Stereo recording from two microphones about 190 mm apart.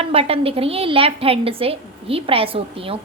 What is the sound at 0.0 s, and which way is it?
A woman's voice, 30° right (ahead or behind).